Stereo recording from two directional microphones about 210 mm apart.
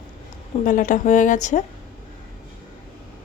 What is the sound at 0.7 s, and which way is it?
Speech, 40° left (ahead or behind).